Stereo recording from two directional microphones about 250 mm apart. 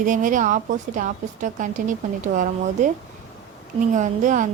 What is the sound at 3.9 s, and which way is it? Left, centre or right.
Speech, right.